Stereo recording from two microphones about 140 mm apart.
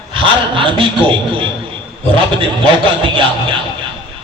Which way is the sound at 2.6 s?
35° right (ahead or behind).